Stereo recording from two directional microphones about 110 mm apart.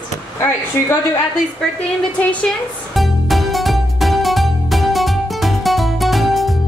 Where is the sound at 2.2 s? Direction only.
10° left (ahead or behind).